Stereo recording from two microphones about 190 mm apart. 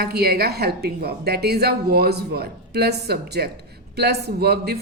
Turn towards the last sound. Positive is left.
turn(degrees=-55)  # may be behind; listen again after turning